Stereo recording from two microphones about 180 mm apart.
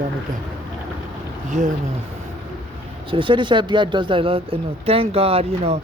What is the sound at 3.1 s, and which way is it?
Speech, 30° right (ahead or behind).